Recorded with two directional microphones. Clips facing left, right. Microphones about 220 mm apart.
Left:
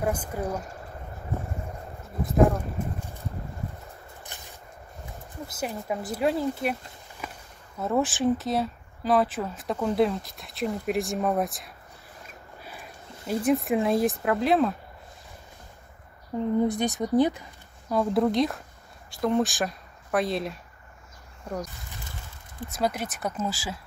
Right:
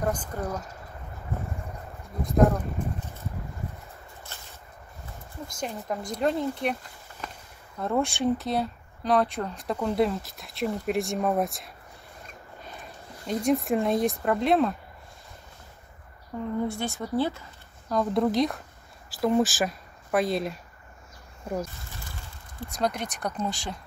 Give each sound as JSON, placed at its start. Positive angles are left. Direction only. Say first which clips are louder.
{"t": 0.0, "sound": "a woman's voice", "louder": "left 1 dB", "side_deg": 10}
{"t": 2.8, "sound": "a woman's voice", "louder": "even", "side_deg": 5}
{"t": 4.3, "sound": "a sound", "louder": "even", "side_deg": 15}
{"t": 5.5, "sound": "speech", "louder": "left 2 dB", "side_deg": 5}
{"t": 16.3, "sound": "a woman's voice", "louder": "left 5 dB", "side_deg": 20}
{"t": 22.7, "sound": "speech", "louder": "left 1 dB", "side_deg": 5}